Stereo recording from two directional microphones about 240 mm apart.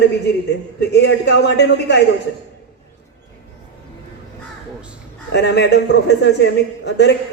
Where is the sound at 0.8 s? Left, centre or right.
Left.